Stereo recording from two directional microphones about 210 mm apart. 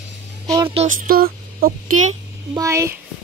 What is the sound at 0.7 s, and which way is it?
Music, 30° right (ahead or behind).